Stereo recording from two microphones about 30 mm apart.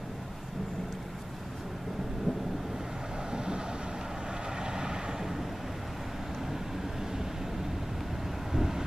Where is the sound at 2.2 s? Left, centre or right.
Centre; by 5.2 s right.